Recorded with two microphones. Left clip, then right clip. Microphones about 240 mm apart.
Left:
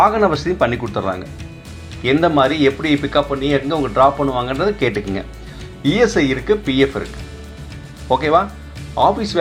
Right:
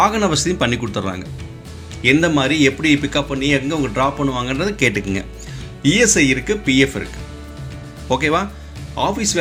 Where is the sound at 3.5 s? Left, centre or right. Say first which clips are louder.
Left 1 dB; right.